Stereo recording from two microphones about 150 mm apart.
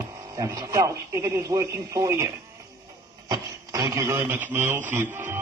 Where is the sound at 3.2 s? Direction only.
25° right (ahead or behind).